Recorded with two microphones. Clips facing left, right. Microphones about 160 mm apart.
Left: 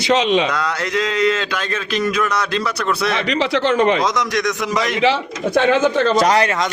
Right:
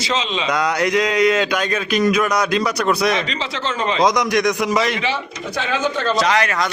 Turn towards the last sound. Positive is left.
turn(degrees=30)  # may be behind; listen again after turning